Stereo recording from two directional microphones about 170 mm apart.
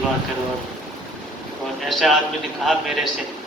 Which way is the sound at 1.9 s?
Centre (ahead or behind).